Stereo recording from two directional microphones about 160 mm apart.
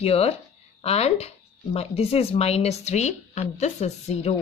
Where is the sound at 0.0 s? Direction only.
40° left (ahead or behind).